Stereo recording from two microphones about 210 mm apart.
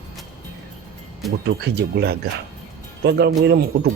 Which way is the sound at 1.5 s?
50° right (ahead or behind).